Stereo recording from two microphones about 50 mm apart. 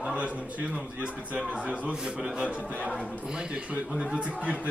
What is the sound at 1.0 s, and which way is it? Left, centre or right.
Speech, right.